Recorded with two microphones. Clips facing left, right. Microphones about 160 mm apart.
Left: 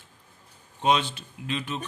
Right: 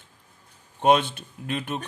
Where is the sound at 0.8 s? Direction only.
55° right (ahead or behind).